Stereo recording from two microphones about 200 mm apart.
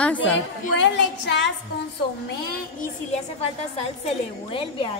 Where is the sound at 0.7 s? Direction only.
65° left (ahead or behind).